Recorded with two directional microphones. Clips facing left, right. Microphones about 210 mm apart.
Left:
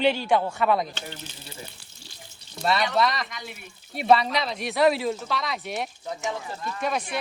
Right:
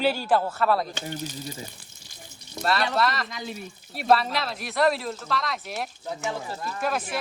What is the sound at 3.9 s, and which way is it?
Speech, centre (ahead or behind).